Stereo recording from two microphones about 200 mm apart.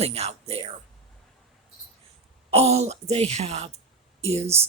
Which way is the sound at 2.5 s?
30° right (ahead or behind).